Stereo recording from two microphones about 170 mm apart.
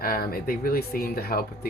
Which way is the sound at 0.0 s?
60° left (ahead or behind).